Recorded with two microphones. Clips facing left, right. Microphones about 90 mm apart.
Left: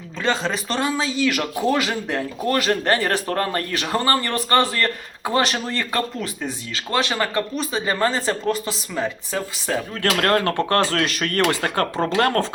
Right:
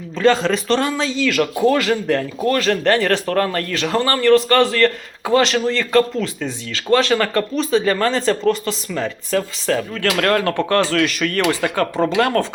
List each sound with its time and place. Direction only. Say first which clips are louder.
0.2 s speech: right 7 dB; centre (ahead or behind)
1.2 s a man's voice: right 6 dB; 15° left (ahead or behind)
9.9 s speech: left 1 dB; 35° left (ahead or behind)